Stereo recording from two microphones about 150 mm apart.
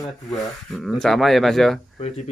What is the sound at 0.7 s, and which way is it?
Speech, centre (ahead or behind).